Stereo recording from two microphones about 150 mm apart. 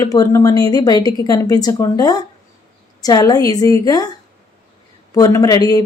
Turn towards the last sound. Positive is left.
turn(degrees=25)  # may be behind; listen again after turning